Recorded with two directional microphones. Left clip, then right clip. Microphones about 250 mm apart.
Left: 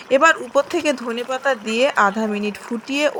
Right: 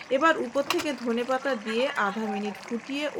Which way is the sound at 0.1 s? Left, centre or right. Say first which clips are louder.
Left 9 dB; left.